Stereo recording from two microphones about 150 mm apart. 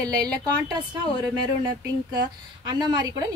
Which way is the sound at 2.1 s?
30° right (ahead or behind).